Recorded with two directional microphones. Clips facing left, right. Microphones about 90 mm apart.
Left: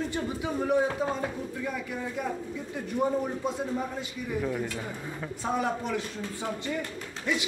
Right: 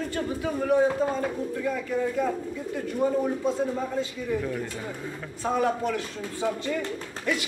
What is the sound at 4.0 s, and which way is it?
A man's voice, 15° left (ahead or behind).